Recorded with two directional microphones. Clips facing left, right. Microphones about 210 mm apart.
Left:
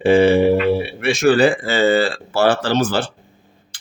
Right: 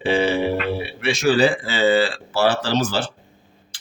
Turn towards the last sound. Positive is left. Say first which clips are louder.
# left 3 dB
turn(degrees=55)  # may be behind; listen again after turning